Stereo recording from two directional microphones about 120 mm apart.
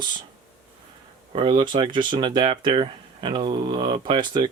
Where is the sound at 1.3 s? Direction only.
40° right (ahead or behind).